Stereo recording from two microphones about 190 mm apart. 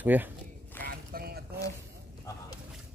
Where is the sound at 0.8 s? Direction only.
50° right (ahead or behind).